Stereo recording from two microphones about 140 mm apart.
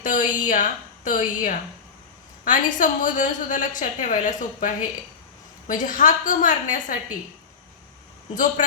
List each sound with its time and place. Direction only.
0.0 s a woman's voice: 70° left (ahead or behind)